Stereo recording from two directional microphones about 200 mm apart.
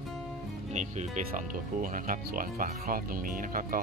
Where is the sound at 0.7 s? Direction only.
35° right (ahead or behind).